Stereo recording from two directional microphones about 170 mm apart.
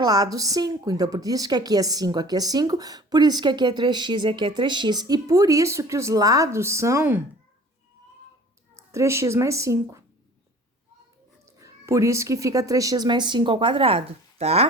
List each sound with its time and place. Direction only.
0.0 s speech: 25° right (ahead or behind)
8.7 s a child's voice: 15° right (ahead or behind)
11.4 s speech: 20° right (ahead or behind); by 14.7 s 35° right (ahead or behind)